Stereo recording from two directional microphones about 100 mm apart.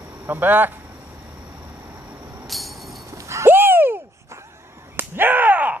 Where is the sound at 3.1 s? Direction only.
30° right (ahead or behind).